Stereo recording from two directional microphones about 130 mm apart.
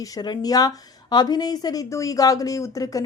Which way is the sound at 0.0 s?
30° left (ahead or behind).